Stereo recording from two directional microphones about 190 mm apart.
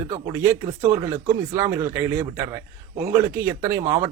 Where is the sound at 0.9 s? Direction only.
15° right (ahead or behind).